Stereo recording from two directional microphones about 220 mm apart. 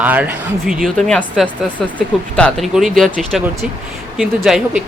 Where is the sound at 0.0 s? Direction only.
5° right (ahead or behind).